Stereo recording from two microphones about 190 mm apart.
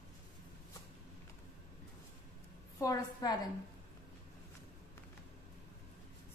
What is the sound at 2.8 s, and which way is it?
Speech, 20° left (ahead or behind).